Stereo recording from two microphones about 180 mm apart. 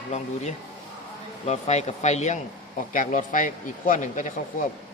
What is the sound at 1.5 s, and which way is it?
Speech, 40° left (ahead or behind).